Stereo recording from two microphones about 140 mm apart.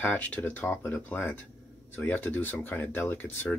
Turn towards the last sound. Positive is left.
turn(degrees=15)  # may be behind; listen again after turning